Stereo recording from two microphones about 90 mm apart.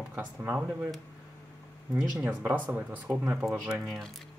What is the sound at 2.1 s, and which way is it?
Speech, 15° right (ahead or behind).